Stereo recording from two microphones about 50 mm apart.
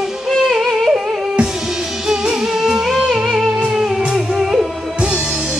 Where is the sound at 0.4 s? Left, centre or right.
Centre.